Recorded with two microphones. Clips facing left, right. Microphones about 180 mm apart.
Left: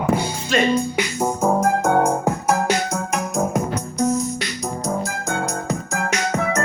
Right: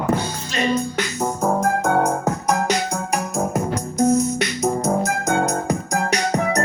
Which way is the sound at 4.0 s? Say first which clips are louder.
Right 4 dB; 60° right (ahead or behind).